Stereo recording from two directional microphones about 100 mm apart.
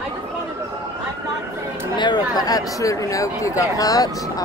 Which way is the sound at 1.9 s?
45° left (ahead or behind).